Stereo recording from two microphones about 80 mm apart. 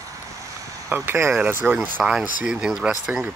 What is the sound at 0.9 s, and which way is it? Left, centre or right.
Speech, right.